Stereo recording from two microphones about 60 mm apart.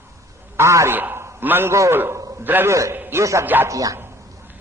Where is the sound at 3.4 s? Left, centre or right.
Right.